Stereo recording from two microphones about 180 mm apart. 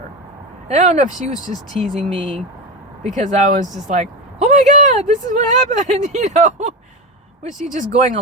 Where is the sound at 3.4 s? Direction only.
45° right (ahead or behind).